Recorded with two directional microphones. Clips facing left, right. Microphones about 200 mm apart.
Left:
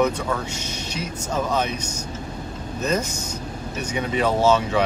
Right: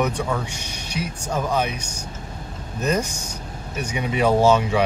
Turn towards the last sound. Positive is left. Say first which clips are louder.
# right 2 dB
turn(degrees=-10)  # may be behind; listen again after turning